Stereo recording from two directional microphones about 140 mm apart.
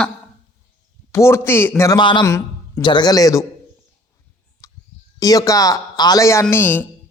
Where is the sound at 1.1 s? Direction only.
20° left (ahead or behind).